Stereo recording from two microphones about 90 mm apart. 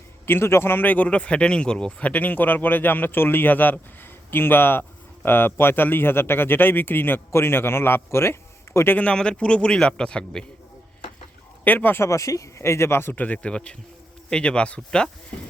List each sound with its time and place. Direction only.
0.3 s speech: 25° left (ahead or behind)
9.0 s a man's voice: 10° left (ahead or behind)
11.6 s speech: 20° left (ahead or behind)
12.0 s a man's voice: 35° left (ahead or behind); by 15.1 s 10° left (ahead or behind)